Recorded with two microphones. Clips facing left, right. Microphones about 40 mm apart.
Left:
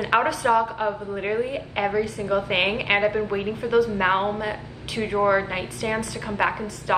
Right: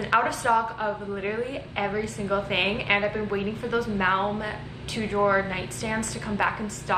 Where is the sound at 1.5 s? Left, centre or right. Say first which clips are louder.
Left 4 dB; centre.